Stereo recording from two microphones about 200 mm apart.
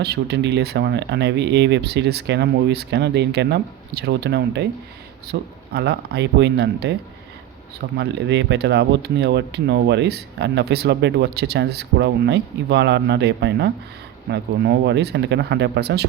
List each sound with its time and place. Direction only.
0.0 s speech: 55° right (ahead or behind)
7.9 s speech: 60° right (ahead or behind)